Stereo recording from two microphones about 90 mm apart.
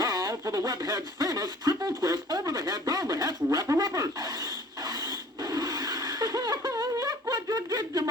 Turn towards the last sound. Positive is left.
turn(degrees=-45)  # may be behind; listen again after turning